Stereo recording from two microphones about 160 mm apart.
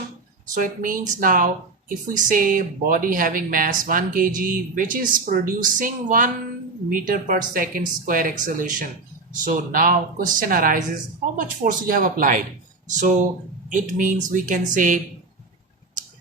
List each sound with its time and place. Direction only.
0.5 s speech: 60° right (ahead or behind)
12.9 s speech: 50° right (ahead or behind)